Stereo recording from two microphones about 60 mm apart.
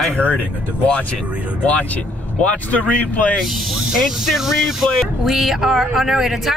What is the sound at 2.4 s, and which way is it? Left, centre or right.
Speech, left.